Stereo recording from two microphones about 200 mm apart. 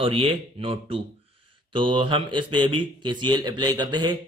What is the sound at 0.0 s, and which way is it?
A man's voice, 30° right (ahead or behind).